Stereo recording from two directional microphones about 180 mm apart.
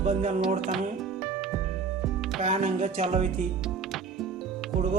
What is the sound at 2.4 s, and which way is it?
Speech, 40° right (ahead or behind).